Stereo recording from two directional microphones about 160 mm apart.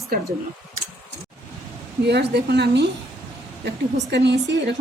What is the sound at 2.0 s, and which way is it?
Speech, 90° right.